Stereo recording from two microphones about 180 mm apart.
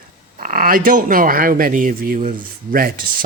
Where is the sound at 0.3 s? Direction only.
50° right (ahead or behind).